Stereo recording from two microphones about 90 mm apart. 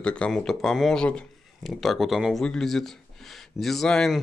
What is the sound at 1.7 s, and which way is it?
Speech, centre (ahead or behind).